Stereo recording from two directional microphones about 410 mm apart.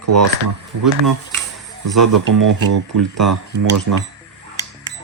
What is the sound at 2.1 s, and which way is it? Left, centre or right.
Speech, right.